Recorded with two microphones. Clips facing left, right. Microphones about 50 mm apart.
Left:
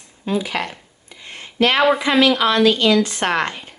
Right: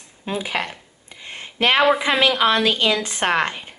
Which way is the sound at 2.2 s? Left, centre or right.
Centre.